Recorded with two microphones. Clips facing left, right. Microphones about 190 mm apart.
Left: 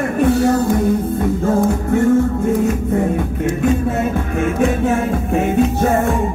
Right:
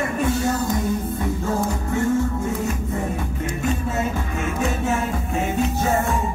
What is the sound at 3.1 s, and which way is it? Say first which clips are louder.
Music: left 8 dB; 55° left (ahead or behind).